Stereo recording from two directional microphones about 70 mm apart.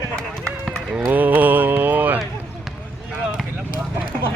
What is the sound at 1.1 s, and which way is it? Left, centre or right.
Mantra, right.